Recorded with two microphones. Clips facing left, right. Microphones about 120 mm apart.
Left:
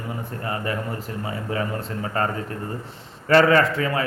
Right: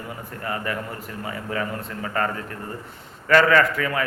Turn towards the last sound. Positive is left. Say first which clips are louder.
# left 1 dB
turn(degrees=30)  # may be behind; listen again after turning